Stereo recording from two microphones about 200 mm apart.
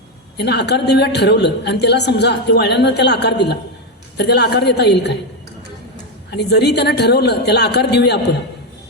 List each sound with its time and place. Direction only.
0.3 s a woman's voice: 55° left (ahead or behind)
6.3 s a woman's voice: 55° left (ahead or behind)